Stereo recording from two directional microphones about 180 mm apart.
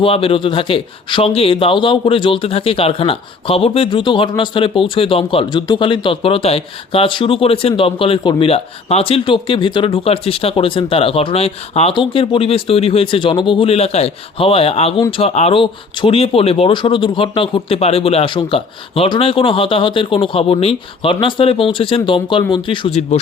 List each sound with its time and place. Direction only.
0.0 s speech: 30° left (ahead or behind)